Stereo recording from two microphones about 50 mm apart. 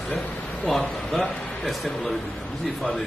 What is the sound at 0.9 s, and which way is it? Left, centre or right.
A man's voice, centre.